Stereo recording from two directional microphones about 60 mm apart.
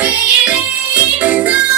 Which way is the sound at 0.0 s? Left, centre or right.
Right.